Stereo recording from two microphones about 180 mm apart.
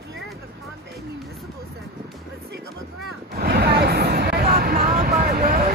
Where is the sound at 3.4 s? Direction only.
65° right (ahead or behind).